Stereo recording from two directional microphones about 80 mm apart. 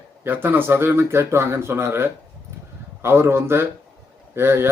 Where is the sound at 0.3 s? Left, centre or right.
Right.